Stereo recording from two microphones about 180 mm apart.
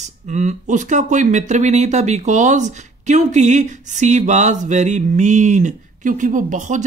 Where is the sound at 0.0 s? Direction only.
40° right (ahead or behind).